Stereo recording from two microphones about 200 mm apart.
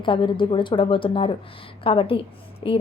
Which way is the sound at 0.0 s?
25° left (ahead or behind).